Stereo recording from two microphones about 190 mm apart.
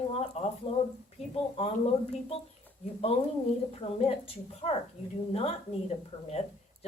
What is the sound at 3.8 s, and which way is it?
Speech, 30° left (ahead or behind).